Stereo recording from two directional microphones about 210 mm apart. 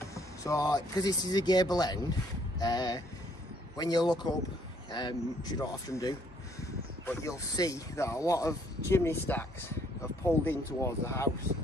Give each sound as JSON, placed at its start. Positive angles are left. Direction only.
{"t": 0.1, "sound": "a man's voice", "side_deg": 15}